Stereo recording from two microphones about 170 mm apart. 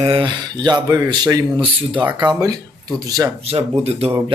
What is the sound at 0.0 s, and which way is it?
Speech, 30° right (ahead or behind).